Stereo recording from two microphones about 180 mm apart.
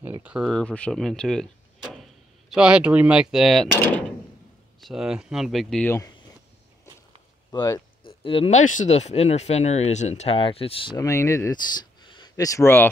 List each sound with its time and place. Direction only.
0.0 s speech: 10° right (ahead or behind)
3.7 s speech: 10° left (ahead or behind)
4.7 s speech: centre (ahead or behind)
7.5 s speech: 20° left (ahead or behind)
11.0 s speech: 15° left (ahead or behind)